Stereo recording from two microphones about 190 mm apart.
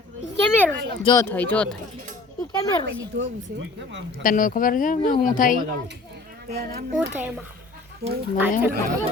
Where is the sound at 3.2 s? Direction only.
70° right (ahead or behind).